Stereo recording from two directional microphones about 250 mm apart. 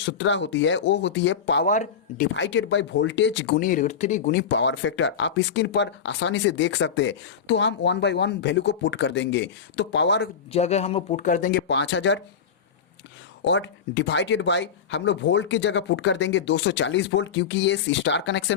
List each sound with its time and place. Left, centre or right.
0.0 s speech: left
1.6 s speech: left
3.6 s speech: left
10.5 s speech: left
13.4 s speech: left